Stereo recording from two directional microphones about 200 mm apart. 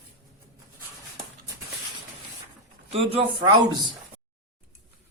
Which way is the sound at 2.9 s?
30° right (ahead or behind).